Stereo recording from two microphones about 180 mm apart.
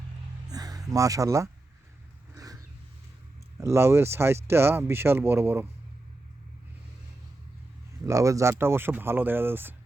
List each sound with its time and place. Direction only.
0.4 s a sound: 20° right (ahead or behind)
2.3 s vehicle: 20° right (ahead or behind)
3.6 s speech: 15° right (ahead or behind)
8.0 s speech: 15° right (ahead or behind)